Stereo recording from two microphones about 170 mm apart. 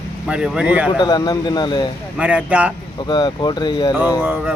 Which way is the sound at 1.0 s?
25° left (ahead or behind).